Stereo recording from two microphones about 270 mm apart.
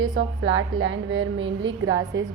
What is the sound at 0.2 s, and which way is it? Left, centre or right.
A woman's voice, right.